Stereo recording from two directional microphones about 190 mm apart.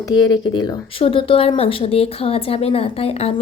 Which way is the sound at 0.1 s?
20° left (ahead or behind).